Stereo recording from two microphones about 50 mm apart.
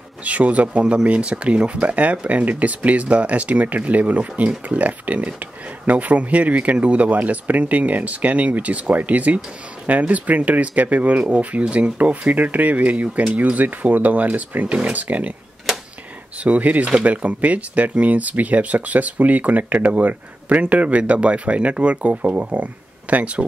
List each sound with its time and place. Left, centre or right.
0.2 s speech: right
11.6 s speech: centre
12.0 s speech: right
16.4 s speech: right